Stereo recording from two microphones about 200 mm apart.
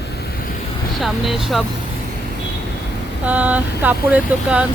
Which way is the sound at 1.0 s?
Centre (ahead or behind).